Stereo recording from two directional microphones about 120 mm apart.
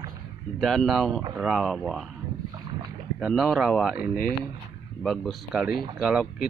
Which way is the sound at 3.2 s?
Centre (ahead or behind).